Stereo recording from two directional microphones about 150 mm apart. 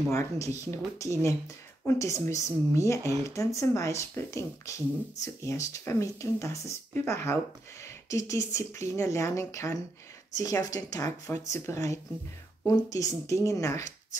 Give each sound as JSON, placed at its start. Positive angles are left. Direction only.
{"t": 0.1, "sound": "speech", "side_deg": 20}